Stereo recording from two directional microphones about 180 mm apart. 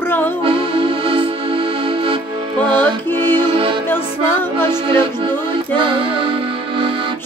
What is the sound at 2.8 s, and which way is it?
Music, 10° left (ahead or behind).